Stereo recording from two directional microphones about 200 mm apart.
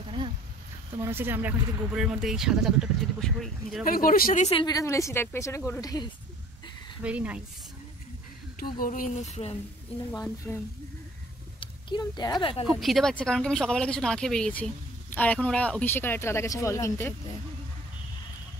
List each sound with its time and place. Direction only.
1.0 s speech: 10° right (ahead or behind)
3.8 s speech: 45° left (ahead or behind)
4.6 s a woman's voice: 20° left (ahead or behind)
7.0 s speech: 5° right (ahead or behind)
8.5 s speech: 45° left (ahead or behind)
10.4 s speech: 5° left (ahead or behind)
11.6 s speech: 20° left (ahead or behind)
12.6 s speech: centre (ahead or behind); by 17.4 s 15° left (ahead or behind)